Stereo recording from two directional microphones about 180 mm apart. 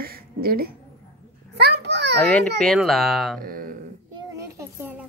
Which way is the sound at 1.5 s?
65° right (ahead or behind).